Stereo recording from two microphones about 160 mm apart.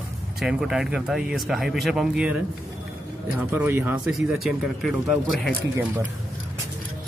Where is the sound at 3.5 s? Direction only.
10° right (ahead or behind).